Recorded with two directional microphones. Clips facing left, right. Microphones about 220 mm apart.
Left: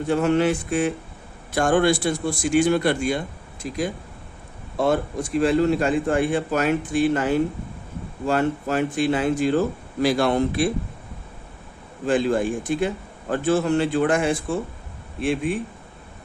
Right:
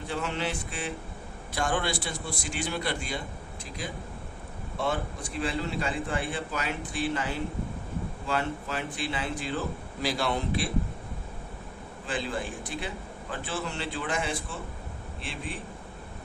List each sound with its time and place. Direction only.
0.1 s a man's voice: 50° left (ahead or behind)
12.0 s a man's voice: 45° left (ahead or behind)